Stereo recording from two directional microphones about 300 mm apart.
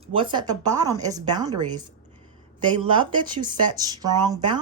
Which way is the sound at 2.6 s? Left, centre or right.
Centre.